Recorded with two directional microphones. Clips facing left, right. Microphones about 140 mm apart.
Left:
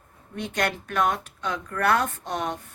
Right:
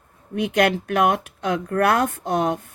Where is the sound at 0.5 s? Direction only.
80° right; by 2.6 s 65° right (ahead or behind).